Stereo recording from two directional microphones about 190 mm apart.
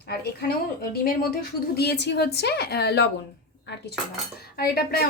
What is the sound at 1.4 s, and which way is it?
A woman's voice, 60° left (ahead or behind).